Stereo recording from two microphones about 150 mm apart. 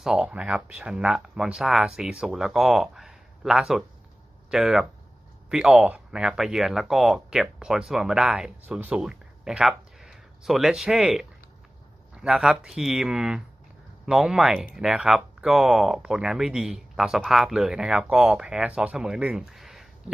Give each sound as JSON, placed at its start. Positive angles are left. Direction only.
{"t": 0.0, "sound": "speech", "side_deg": -5}